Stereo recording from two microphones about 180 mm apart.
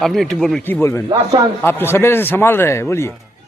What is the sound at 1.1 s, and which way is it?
Speech, 20° right (ahead or behind).